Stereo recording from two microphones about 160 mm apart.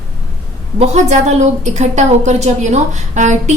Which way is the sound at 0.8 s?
45° right (ahead or behind).